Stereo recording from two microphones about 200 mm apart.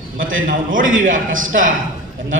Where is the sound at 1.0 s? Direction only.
40° right (ahead or behind).